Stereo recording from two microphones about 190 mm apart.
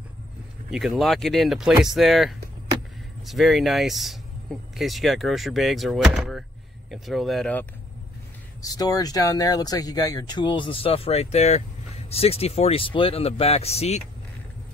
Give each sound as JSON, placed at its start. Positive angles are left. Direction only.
{"t": 0.7, "sound": "speech", "side_deg": 0}
{"t": 8.6, "sound": "speech", "side_deg": 20}